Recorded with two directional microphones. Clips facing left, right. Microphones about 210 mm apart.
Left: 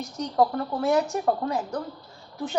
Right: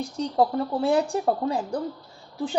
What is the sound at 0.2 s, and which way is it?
A woman's voice, 30° right (ahead or behind).